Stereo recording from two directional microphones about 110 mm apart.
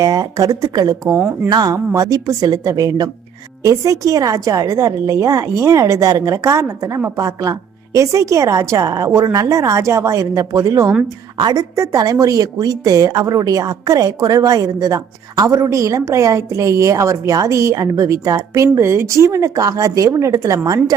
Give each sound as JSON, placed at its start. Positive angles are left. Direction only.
{"t": 0.0, "sound": "a woman's voice", "side_deg": -35}
{"t": 1.0, "sound": "speech", "side_deg": -20}
{"t": 1.5, "sound": "a woman's voice", "side_deg": -40}